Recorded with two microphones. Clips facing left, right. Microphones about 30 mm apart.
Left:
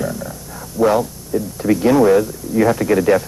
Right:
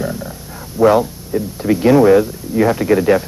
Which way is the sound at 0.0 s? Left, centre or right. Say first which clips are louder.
Right 1 dB; centre.